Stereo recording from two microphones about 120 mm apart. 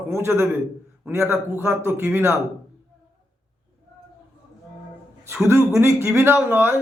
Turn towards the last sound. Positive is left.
turn(degrees=-20)  # may be behind; listen again after turning